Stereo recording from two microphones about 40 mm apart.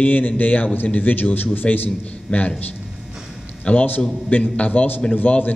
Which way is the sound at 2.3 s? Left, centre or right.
Left.